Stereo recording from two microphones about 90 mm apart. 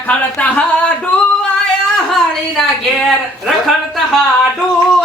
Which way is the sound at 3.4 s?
Centre (ahead or behind).